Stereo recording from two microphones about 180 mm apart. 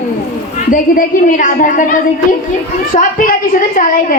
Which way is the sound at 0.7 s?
45° left (ahead or behind).